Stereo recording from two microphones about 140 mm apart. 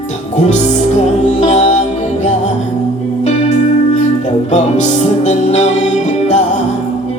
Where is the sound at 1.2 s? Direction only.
55° left (ahead or behind).